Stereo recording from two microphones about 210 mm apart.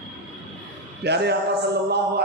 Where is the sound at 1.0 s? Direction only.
50° right (ahead or behind).